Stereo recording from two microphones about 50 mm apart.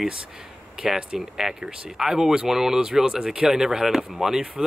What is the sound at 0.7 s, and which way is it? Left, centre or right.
Speech, centre.